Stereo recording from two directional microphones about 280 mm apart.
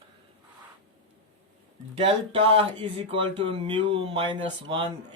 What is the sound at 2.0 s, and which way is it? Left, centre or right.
Speech, centre.